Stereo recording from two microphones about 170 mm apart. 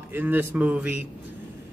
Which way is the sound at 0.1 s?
10° right (ahead or behind).